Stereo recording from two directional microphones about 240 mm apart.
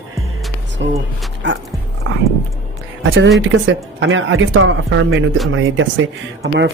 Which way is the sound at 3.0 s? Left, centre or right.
Right.